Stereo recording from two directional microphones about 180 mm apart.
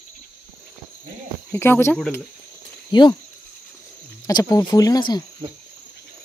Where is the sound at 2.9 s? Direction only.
25° left (ahead or behind).